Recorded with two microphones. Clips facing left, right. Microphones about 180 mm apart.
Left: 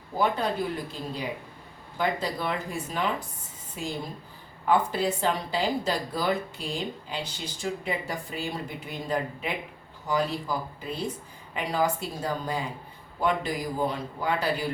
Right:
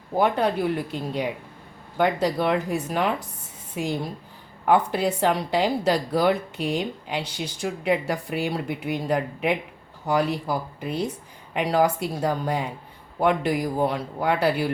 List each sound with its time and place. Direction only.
0.2 s speech: 65° right (ahead or behind)
4.6 s speech: 65° right (ahead or behind)